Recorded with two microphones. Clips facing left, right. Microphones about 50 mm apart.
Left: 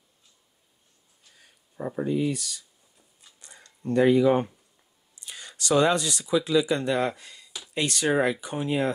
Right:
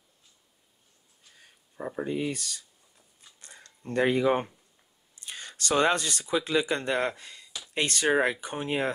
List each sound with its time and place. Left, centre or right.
1.8 s speech: centre
2.0 s speech: right
3.3 s a sound: right
5.1 s speech: right